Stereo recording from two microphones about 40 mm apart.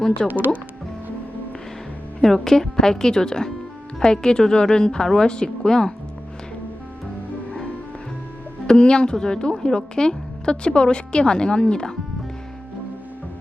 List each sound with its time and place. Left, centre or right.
0.3 s speech: right
2.2 s speech: centre
8.6 s speech: left